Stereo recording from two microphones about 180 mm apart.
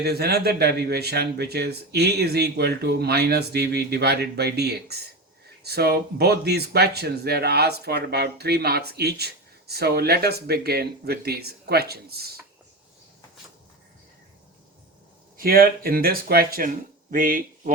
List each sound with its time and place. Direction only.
0.0 s speech: 60° right (ahead or behind)
15.4 s speech: 55° right (ahead or behind)